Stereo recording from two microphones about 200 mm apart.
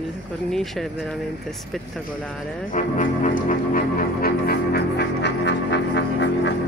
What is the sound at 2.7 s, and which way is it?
Music, 40° left (ahead or behind).